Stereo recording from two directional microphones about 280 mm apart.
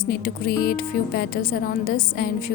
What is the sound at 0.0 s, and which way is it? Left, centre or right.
Speech, left.